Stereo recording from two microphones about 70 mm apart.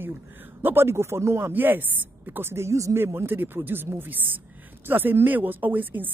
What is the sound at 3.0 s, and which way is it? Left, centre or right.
A woman's voice, right.